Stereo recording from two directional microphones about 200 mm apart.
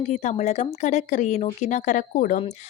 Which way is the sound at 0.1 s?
35° left (ahead or behind).